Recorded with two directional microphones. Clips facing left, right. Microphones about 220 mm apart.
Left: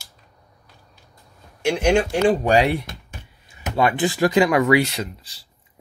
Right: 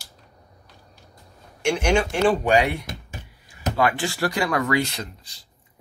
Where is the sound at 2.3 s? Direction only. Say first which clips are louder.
Left 3 dB; 35° left (ahead or behind).